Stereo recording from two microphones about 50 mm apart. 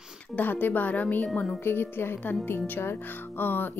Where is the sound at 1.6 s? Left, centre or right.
Left.